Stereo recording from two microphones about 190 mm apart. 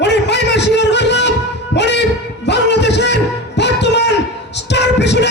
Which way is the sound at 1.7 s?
65° left (ahead or behind).